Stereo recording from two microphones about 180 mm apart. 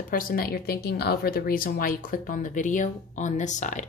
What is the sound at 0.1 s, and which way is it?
Speech, 55° left (ahead or behind).